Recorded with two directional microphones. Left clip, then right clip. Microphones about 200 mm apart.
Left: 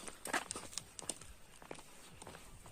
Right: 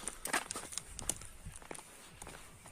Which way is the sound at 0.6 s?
45° right (ahead or behind).